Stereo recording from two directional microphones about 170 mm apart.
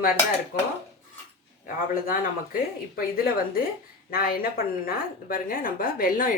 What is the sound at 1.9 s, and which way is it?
A woman's voice, 55° left (ahead or behind).